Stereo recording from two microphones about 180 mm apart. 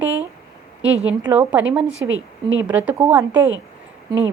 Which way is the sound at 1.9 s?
90° right.